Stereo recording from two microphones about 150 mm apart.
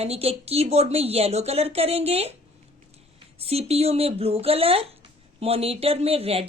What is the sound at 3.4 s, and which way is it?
Speech, 40° right (ahead or behind).